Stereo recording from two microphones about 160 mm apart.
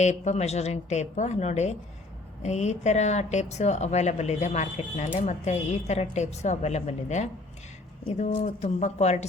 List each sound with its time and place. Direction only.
0.0 s speech: 45° left (ahead or behind)